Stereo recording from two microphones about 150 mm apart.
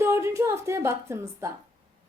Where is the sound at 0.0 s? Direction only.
20° right (ahead or behind).